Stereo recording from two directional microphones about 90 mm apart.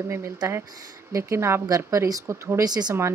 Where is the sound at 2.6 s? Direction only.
45° right (ahead or behind).